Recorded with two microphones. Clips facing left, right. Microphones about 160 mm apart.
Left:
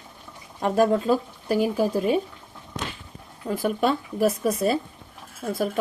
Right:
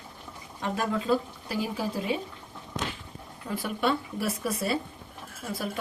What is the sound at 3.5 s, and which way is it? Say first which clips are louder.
Speech: left 5 dB; 50° left (ahead or behind).